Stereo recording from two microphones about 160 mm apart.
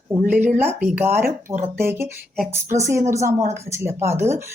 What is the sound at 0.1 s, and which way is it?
A woman's voice, 10° right (ahead or behind).